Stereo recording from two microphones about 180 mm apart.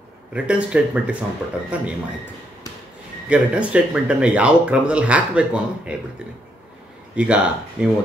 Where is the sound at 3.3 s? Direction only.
5° right (ahead or behind).